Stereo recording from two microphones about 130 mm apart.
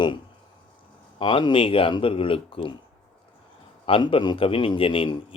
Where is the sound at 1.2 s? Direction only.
40° left (ahead or behind).